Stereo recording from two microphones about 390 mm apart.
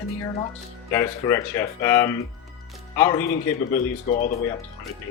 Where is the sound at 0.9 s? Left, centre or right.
Centre.